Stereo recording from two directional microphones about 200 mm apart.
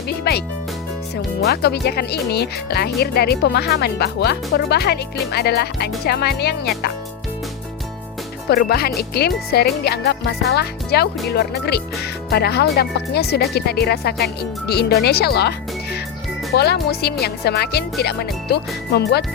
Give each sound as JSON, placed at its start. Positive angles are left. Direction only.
{"t": 0.1, "sound": "music", "side_deg": 55}
{"t": 1.1, "sound": "speech", "side_deg": 55}
{"t": 8.4, "sound": "speech", "side_deg": 50}